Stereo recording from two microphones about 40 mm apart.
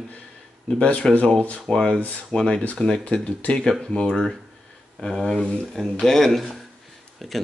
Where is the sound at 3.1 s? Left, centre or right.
Left.